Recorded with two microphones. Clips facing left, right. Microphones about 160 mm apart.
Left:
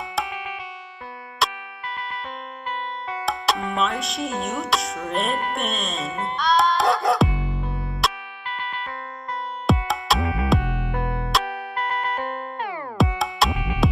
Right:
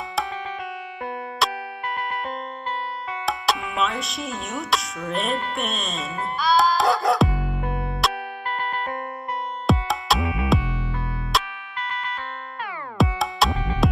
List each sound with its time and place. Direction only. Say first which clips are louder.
1.4 s music: even; centre (ahead or behind)
3.3 s speech: left 1 dB; centre (ahead or behind)
6.4 s music: even; centre (ahead or behind)
7.2 s music: right 2 dB; 50° right (ahead or behind)
8.5 s music: right 3 dB; 45° right (ahead or behind)
9.7 s music: even; centre (ahead or behind)
10.2 s music: left 1 dB; 20° right (ahead or behind)
10.6 s music: left 3 dB; 60° left (ahead or behind)
11.4 s music: left 6 dB; 50° left (ahead or behind)
12.9 s music: right 1 dB; centre (ahead or behind)
13.5 s music: right 1 dB; 15° left (ahead or behind)